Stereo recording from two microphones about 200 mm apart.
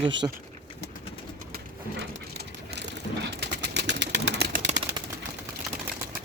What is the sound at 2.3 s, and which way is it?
Pigeon, 55° right (ahead or behind).